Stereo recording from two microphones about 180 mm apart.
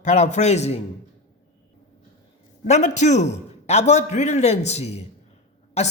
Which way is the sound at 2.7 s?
40° left (ahead or behind).